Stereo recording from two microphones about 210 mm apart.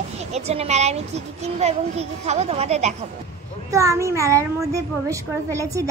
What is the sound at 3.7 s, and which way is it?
A child's voice, 15° right (ahead or behind).